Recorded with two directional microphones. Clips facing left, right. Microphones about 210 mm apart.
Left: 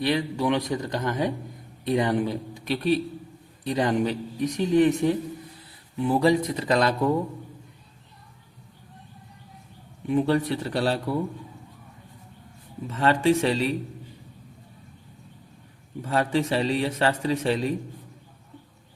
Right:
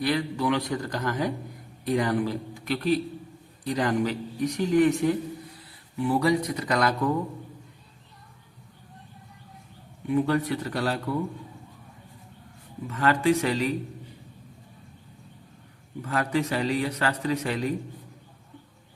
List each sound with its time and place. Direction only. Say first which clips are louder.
0.0 s a man's voice: left 1 dB; 20° left (ahead or behind)
10.1 s a man's voice: left 2 dB; 25° left (ahead or behind)
12.9 s a man's voice: left 2 dB; 25° left (ahead or behind)
16.0 s a man's voice: left 2 dB; 25° left (ahead or behind)